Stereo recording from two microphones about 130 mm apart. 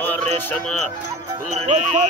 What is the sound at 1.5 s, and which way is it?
Speech, 60° right (ahead or behind).